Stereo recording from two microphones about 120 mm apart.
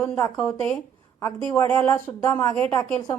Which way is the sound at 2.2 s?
25° left (ahead or behind).